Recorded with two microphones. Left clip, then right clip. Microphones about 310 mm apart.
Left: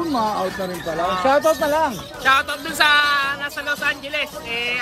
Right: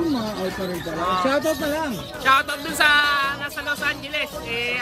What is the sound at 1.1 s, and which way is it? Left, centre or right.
Speech, centre.